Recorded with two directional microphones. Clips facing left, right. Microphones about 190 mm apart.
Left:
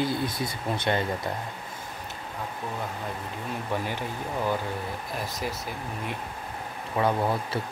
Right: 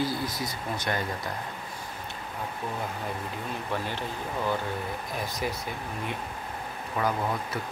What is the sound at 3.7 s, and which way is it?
Speech, 15° left (ahead or behind).